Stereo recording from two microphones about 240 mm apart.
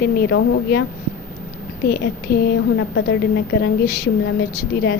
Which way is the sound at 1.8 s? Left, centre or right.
Left.